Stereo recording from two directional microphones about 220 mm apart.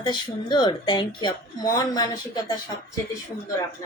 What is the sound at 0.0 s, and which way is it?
Speech, 20° left (ahead or behind).